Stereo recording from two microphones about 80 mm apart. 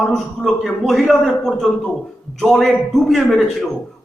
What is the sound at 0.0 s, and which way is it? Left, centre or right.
A man's voice, centre.